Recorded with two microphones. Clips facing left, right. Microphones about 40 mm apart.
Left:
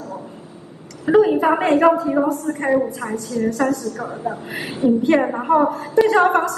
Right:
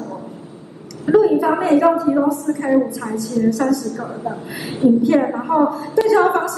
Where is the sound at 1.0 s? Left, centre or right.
Left.